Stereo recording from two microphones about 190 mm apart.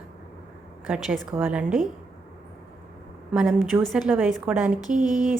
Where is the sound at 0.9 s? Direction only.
Centre (ahead or behind).